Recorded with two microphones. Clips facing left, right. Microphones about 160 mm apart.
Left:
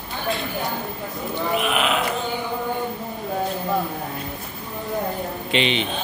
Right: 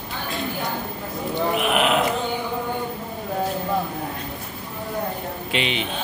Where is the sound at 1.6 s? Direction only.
60° right (ahead or behind).